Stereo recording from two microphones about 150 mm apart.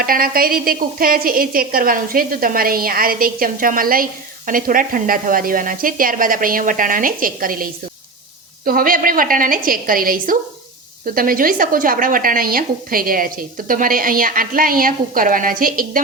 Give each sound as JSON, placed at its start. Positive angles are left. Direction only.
{"t": 0.0, "sound": "a woman's voice", "side_deg": -75}